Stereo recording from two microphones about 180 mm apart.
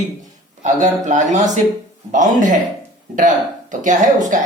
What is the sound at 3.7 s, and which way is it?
Speech, 45° right (ahead or behind).